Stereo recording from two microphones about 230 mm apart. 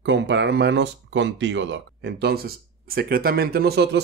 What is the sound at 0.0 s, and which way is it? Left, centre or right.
Speech, right.